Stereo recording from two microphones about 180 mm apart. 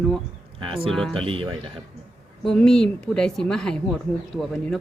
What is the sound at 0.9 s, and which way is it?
Speech, 5° left (ahead or behind).